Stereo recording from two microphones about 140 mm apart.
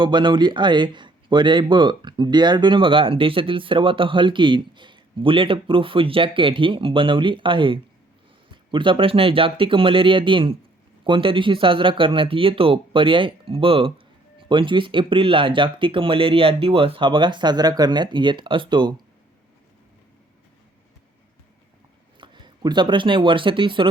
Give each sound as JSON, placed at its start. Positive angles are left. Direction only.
{"t": 0.0, "sound": "speech", "side_deg": -35}
{"t": 22.2, "sound": "speech", "side_deg": -35}